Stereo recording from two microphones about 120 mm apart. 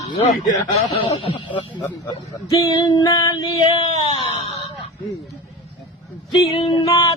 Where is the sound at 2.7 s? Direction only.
35° left (ahead or behind).